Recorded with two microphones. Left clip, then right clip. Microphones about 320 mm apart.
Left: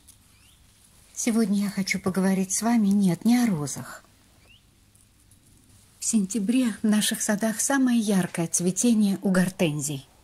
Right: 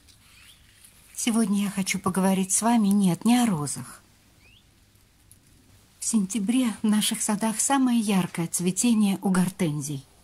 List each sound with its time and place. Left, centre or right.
1.2 s speech: centre
5.9 s speech: centre